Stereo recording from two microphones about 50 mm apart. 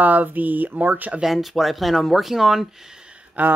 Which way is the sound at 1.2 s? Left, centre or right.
Centre.